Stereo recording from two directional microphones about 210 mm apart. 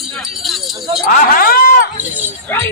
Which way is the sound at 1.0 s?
45° left (ahead or behind).